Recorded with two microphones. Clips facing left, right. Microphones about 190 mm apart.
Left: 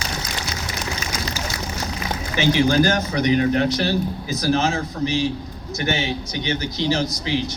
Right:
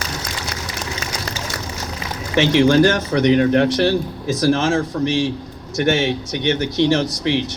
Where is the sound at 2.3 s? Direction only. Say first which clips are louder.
Right 4 dB; 75° right (ahead or behind).